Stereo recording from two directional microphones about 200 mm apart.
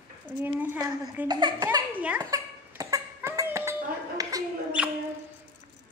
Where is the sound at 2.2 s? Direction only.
15° right (ahead or behind).